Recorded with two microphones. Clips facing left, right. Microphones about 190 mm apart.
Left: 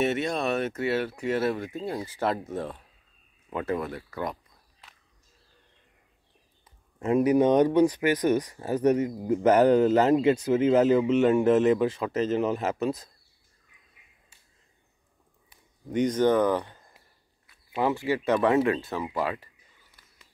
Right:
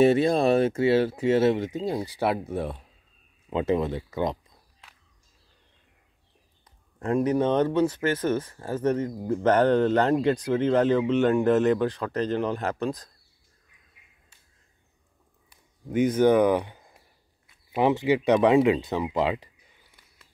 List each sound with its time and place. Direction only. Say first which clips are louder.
0.0 s speech: right 7 dB; 30° right (ahead or behind)
7.0 s speech: left 2 dB; 5° left (ahead or behind)
15.5 s a sound: right 2 dB; 5° right (ahead or behind)
17.5 s speech: right 4 dB; 20° right (ahead or behind)